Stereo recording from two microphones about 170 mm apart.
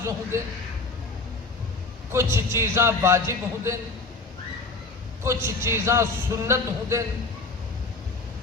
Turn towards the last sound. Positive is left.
turn(degrees=-15)  # may be behind; listen again after turning